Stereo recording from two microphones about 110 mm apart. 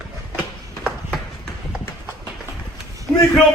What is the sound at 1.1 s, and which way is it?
Run, 5° left (ahead or behind).